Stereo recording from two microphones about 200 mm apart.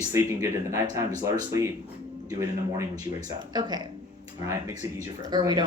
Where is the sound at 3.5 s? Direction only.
20° right (ahead or behind).